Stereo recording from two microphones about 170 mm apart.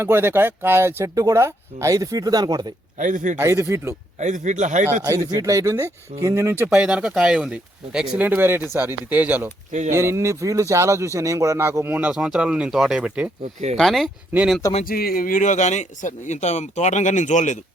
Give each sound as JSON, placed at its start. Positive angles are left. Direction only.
{"t": 0.0, "sound": "speech", "side_deg": -15}
{"t": 3.0, "sound": "speech", "side_deg": -50}
{"t": 3.3, "sound": "speech", "side_deg": -15}
{"t": 4.2, "sound": "speech", "side_deg": -45}
{"t": 5.0, "sound": "speech", "side_deg": -15}
{"t": 6.7, "sound": "speech", "side_deg": -5}
{"t": 14.8, "sound": "speech", "side_deg": 60}